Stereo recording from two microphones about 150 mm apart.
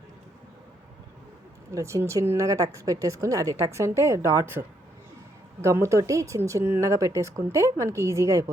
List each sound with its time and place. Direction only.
1.7 s a woman's voice: 20° right (ahead or behind)
5.6 s a woman's voice: 20° right (ahead or behind)